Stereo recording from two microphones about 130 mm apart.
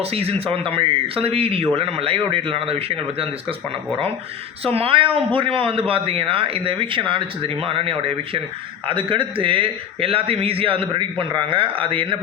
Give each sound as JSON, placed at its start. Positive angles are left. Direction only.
{"t": 0.0, "sound": "speech", "side_deg": -50}
{"t": 4.6, "sound": "speech", "side_deg": -50}